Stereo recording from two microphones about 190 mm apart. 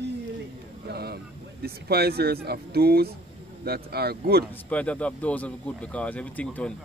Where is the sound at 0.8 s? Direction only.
55° right (ahead or behind).